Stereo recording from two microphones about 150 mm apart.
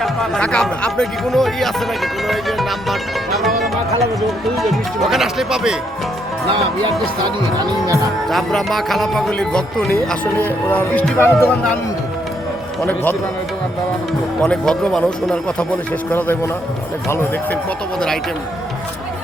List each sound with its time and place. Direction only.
0.0 s speech: 5° left (ahead or behind)
4.5 s speech: centre (ahead or behind)
8.3 s speech: centre (ahead or behind)
12.8 s speech: 10° left (ahead or behind)
14.4 s speech: 5° left (ahead or behind)